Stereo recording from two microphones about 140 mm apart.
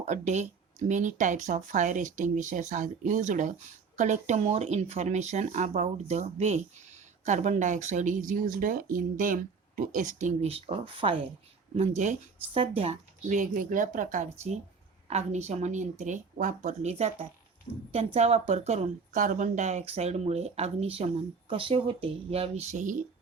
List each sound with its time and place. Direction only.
0.1 s speech: 55° right (ahead or behind); by 11.2 s 40° right (ahead or behind)
11.8 s a woman's voice: 50° right (ahead or behind)